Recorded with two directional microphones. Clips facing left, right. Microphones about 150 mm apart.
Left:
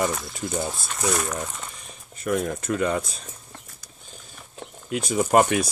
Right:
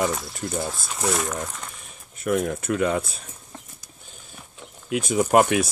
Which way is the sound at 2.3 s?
5° right (ahead or behind).